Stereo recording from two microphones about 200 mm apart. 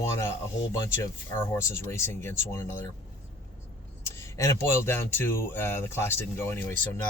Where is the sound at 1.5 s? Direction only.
10° left (ahead or behind).